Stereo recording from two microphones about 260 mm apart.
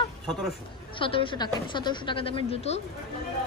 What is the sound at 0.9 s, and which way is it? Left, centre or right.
Speech, centre.